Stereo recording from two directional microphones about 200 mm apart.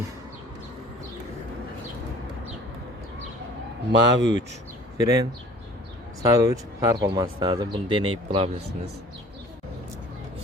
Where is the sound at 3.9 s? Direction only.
65° right (ahead or behind).